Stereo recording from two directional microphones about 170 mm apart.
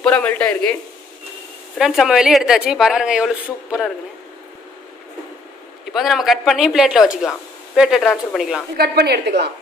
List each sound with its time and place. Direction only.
0.0 s speech: 10° left (ahead or behind)
1.8 s speech: centre (ahead or behind)
5.9 s speech: centre (ahead or behind)
8.7 s a woman's voice: 65° right (ahead or behind)